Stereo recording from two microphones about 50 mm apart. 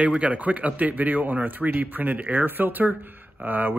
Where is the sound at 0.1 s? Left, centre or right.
Right.